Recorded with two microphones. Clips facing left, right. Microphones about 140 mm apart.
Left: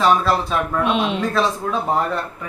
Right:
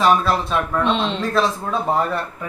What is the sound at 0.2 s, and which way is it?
Speech, 5° left (ahead or behind).